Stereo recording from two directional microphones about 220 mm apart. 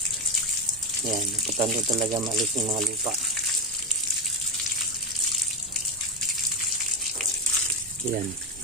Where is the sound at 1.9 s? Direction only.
20° right (ahead or behind).